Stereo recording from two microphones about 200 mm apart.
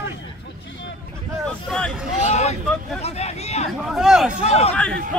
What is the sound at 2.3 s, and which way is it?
Vehicle, 35° left (ahead or behind).